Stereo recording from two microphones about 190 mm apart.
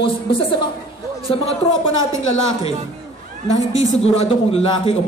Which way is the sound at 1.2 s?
30° left (ahead or behind).